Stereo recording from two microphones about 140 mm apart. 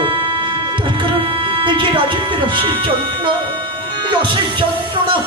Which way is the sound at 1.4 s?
35° right (ahead or behind).